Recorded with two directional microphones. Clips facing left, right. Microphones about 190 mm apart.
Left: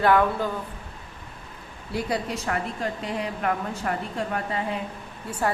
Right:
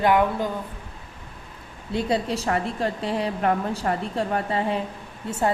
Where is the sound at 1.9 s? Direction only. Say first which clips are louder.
Right 4 dB; 25° right (ahead or behind).